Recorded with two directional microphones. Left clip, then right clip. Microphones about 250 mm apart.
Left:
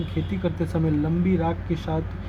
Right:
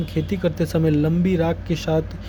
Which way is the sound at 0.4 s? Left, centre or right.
Right.